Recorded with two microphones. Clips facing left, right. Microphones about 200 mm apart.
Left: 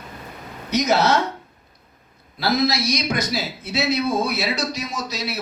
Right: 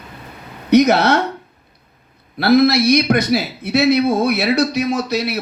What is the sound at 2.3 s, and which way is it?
A man's voice, 60° right (ahead or behind).